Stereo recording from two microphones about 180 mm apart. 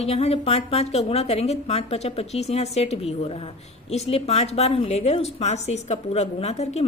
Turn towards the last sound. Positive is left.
turn(degrees=35)  # may be behind; listen again after turning